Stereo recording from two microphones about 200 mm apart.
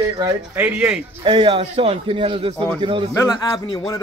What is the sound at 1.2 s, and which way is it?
A man's voice, 25° right (ahead or behind).